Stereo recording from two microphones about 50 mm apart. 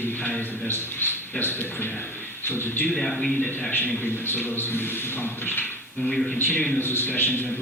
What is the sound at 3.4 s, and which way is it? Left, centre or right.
Speech, left.